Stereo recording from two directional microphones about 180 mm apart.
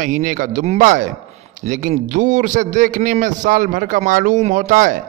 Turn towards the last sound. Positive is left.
turn(degrees=-45)  # may be behind; listen again after turning